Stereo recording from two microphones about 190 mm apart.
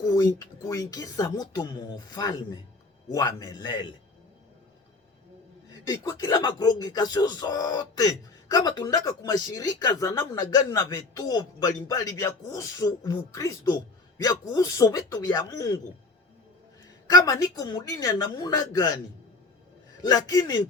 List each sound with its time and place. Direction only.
0.0 s speech: 15° left (ahead or behind)
5.8 s speech: 20° left (ahead or behind)
17.1 s speech: 20° left (ahead or behind)
20.0 s speech: 20° left (ahead or behind)